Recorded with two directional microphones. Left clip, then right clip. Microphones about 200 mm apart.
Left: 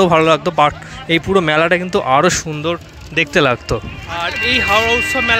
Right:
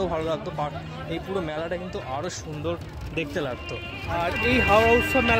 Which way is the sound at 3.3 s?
35° left (ahead or behind).